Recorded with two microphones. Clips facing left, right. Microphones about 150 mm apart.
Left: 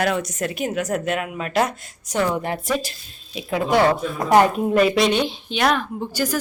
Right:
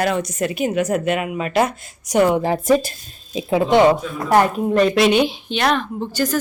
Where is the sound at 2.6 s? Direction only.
50° right (ahead or behind).